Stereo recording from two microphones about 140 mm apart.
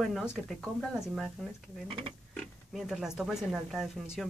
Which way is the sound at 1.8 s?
40° right (ahead or behind).